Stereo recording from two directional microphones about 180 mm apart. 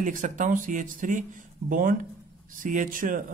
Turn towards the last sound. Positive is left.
turn(degrees=-50)  # may be behind; listen again after turning